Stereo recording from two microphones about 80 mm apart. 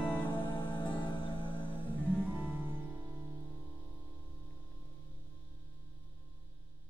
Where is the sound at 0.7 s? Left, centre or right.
Left.